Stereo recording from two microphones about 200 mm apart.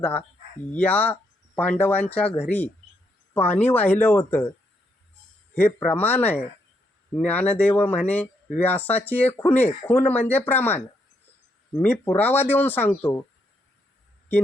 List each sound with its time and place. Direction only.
0.0 s speech: 10° left (ahead or behind)
3.3 s speech: 10° left (ahead or behind)
5.5 s speech: 10° left (ahead or behind)